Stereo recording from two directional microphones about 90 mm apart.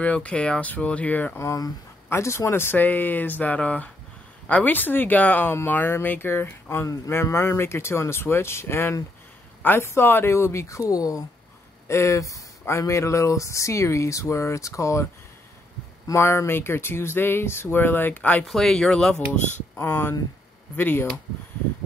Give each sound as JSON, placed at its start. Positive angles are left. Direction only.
{"t": 0.0, "sound": "speech", "side_deg": 15}
{"t": 1.4, "sound": "speech", "side_deg": 35}
{"t": 16.1, "sound": "speech", "side_deg": 30}
{"t": 18.5, "sound": "speech", "side_deg": 5}
{"t": 19.8, "sound": "speech", "side_deg": 25}